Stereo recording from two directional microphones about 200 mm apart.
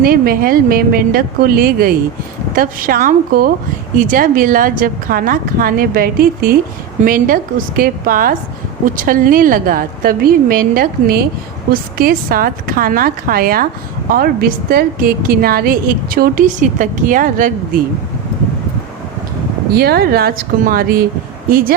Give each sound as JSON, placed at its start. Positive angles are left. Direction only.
{"t": 0.0, "sound": "a woman's voice", "side_deg": -50}
{"t": 19.7, "sound": "a woman's voice", "side_deg": -50}